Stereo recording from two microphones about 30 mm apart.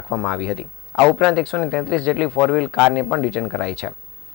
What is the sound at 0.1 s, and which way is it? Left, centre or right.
A man's voice, centre.